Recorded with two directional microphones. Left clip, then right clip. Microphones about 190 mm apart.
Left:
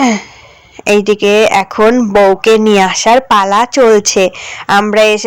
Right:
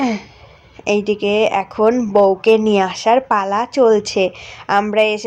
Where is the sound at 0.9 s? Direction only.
20° left (ahead or behind).